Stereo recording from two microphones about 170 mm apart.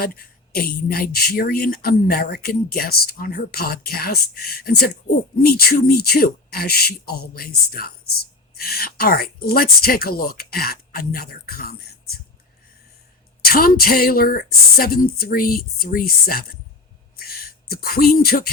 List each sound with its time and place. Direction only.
0.0 s speech: 60° left (ahead or behind)
13.4 s speech: 60° left (ahead or behind)
17.2 s a sound: 60° left (ahead or behind)